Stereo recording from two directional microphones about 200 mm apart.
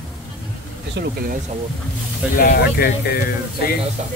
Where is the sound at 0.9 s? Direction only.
45° right (ahead or behind).